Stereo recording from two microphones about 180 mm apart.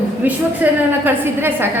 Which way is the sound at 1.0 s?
10° right (ahead or behind).